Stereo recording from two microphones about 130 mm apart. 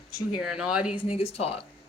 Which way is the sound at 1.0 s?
50° left (ahead or behind).